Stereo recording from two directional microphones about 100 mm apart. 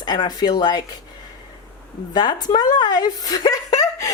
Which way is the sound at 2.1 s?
45° left (ahead or behind).